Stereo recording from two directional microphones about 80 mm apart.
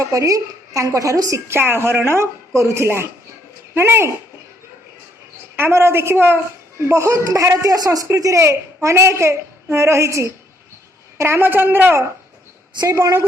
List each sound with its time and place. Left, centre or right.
0.0 s a woman's voice: right
1.5 s a woman's voice: right
5.5 s a woman's voice: right